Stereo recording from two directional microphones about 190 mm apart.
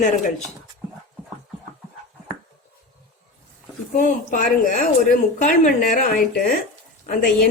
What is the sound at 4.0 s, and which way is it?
Speech, 45° left (ahead or behind).